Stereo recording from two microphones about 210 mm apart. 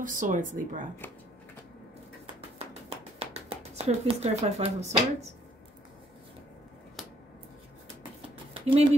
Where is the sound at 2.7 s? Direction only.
30° right (ahead or behind).